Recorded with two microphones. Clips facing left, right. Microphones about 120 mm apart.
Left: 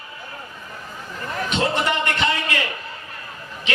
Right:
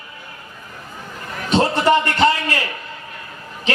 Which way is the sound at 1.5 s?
35° right (ahead or behind).